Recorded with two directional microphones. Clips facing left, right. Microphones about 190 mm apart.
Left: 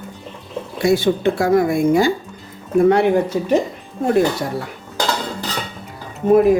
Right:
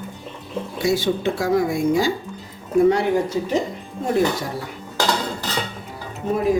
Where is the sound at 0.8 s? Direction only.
55° left (ahead or behind).